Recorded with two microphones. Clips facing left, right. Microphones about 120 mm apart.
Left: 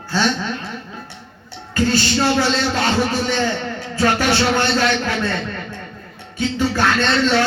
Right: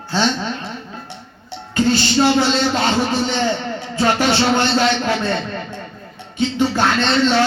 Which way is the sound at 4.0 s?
25° right (ahead or behind).